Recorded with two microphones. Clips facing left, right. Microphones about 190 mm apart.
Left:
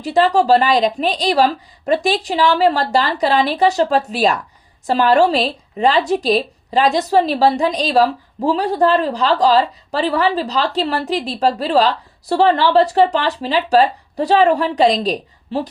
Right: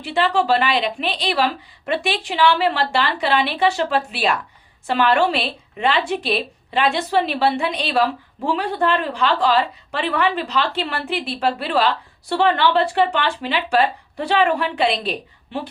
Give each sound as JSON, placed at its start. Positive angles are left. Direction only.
{"t": 0.0, "sound": "speech", "side_deg": 40}